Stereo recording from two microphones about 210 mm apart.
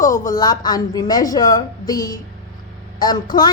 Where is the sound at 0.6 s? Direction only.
20° left (ahead or behind).